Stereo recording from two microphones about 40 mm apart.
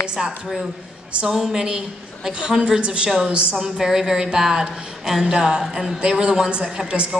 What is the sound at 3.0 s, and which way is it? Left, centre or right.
A woman's voice, centre.